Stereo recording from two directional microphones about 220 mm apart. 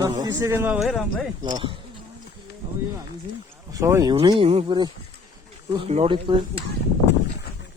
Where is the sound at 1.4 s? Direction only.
20° right (ahead or behind).